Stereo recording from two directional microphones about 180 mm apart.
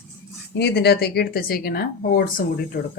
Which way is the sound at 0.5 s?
65° left (ahead or behind).